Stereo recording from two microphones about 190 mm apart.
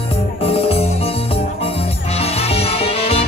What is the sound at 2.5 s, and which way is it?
Music, 30° left (ahead or behind).